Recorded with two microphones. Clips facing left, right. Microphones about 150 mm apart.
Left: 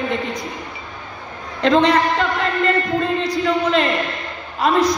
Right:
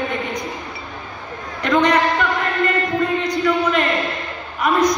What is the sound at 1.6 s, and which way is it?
Speech, 30° left (ahead or behind).